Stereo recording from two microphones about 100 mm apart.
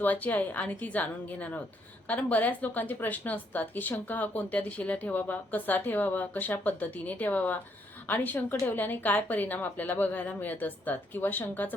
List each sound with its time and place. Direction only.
0.0 s a woman's voice: 15° left (ahead or behind)